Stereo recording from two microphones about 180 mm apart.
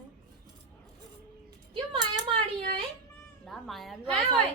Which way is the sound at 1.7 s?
30° right (ahead or behind).